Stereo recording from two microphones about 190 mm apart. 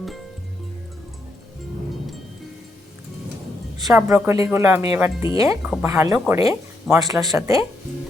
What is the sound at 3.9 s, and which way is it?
Speech, 15° right (ahead or behind).